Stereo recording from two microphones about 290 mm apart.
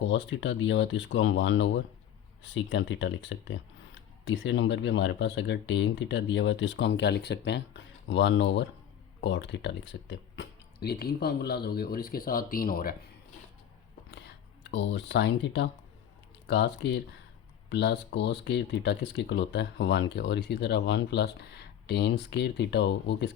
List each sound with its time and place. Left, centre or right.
0.0 s speech: left
14.7 s speech: left